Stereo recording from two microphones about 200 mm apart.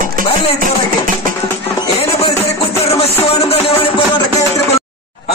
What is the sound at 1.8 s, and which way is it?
Music, 30° left (ahead or behind).